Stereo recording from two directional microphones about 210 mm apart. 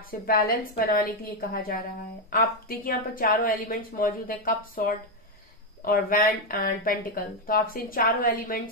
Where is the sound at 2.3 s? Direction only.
45° left (ahead or behind).